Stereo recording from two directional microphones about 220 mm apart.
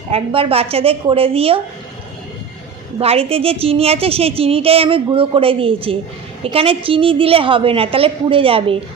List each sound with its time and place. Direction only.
0.1 s a woman's voice: 25° right (ahead or behind)
3.0 s a woman's voice: 25° right (ahead or behind)